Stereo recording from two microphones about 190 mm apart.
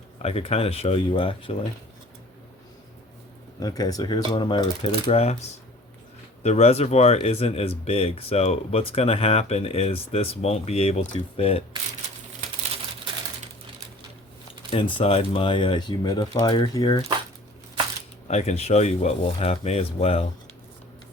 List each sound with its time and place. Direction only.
0.2 s speech: 30° left (ahead or behind)
3.6 s speech: 20° left (ahead or behind)
14.7 s speech: 25° left (ahead or behind)
18.3 s speech: 35° left (ahead or behind)